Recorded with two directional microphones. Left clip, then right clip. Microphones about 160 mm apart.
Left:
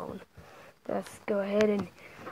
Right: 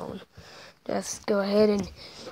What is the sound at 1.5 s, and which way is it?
Speech, 20° right (ahead or behind).